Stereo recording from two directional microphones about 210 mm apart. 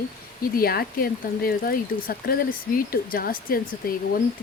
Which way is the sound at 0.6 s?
45° left (ahead or behind).